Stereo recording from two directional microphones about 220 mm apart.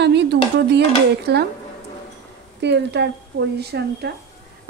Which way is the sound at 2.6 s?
50° right (ahead or behind).